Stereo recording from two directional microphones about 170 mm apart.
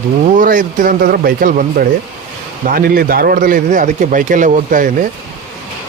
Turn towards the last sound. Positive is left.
turn(degrees=-50)  # may be behind; listen again after turning